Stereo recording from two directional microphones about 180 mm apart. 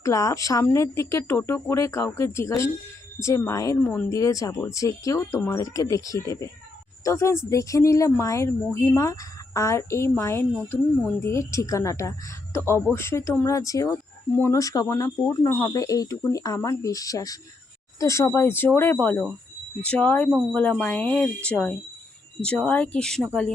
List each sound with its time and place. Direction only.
0.0 s a woman's voice: 20° left (ahead or behind)